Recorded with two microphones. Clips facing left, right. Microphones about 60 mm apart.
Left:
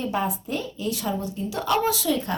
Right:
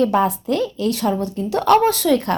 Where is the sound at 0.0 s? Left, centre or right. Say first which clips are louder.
Right 9 dB; right.